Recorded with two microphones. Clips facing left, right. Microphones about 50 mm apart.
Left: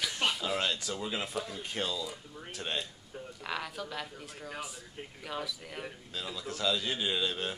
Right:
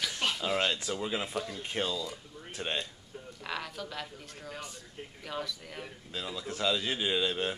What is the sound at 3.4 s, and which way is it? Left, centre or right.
A woman's voice, centre.